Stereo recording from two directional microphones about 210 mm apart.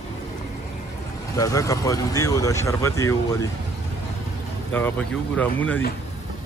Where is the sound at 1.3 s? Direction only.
15° left (ahead or behind).